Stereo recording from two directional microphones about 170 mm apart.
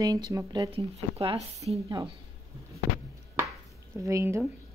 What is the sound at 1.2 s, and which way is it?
Speech, 35° right (ahead or behind).